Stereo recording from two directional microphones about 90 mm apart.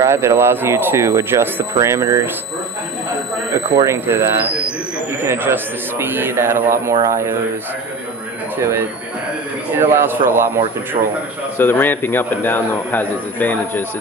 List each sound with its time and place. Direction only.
0.0 s a man's voice: 30° right (ahead or behind)
3.8 s a man's voice: 25° right (ahead or behind)
9.8 s a man's voice: 25° right (ahead or behind)
11.5 s a man's voice: 25° left (ahead or behind)